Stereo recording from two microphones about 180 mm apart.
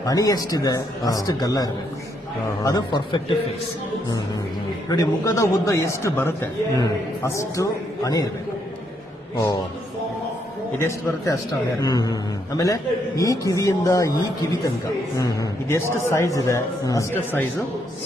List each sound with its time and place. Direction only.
0.0 s a man's voice: 20° left (ahead or behind)
4.9 s a man's voice: 20° left (ahead or behind)
10.8 s a man's voice: 15° left (ahead or behind)
15.2 s a man's voice: 20° left (ahead or behind)